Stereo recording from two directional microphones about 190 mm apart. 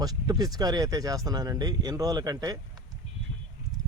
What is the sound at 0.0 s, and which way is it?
Speech, 20° right (ahead or behind).